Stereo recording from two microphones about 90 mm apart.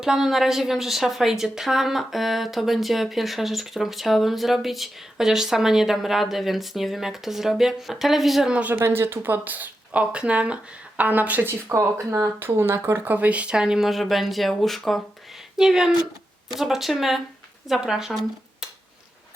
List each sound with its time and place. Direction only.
0.0 s a woman's voice: 5° right (ahead or behind)
8.8 s speech: 25° right (ahead or behind)
11.7 s a woman's voice: 30° right (ahead or behind); by 18.2 s 5° right (ahead or behind)